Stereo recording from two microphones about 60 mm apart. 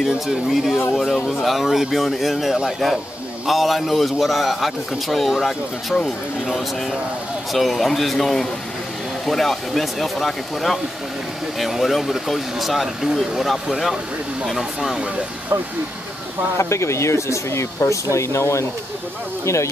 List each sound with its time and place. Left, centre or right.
0.0 s a man's voice: centre
16.5 s speech: left